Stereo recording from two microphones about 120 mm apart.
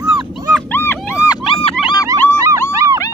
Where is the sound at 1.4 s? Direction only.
50° left (ahead or behind).